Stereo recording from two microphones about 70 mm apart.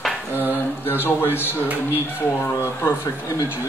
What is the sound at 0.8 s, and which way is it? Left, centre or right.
Speech, left.